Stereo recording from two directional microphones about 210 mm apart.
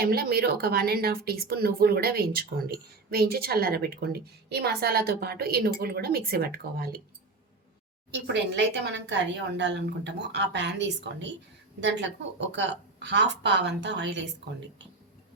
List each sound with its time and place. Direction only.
0.0 s speech: 45° right (ahead or behind)
8.1 s speech: 55° right (ahead or behind)